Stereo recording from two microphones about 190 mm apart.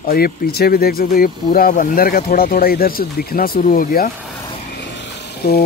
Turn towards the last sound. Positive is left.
turn(degrees=55)  # may be behind; listen again after turning